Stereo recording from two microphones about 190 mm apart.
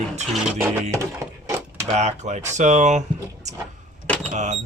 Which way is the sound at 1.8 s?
35° right (ahead or behind).